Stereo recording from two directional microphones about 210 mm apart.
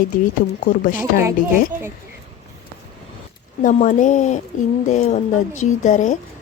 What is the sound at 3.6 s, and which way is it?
Speech, 35° left (ahead or behind).